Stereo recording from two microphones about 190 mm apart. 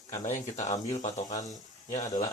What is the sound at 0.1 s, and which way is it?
A man's voice, 40° left (ahead or behind).